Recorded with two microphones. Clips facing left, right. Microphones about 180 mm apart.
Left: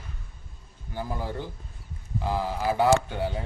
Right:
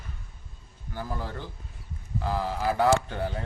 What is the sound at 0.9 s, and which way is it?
Speech, 15° left (ahead or behind).